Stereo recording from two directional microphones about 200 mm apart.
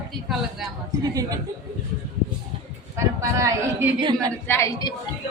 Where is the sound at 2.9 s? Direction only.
15° right (ahead or behind).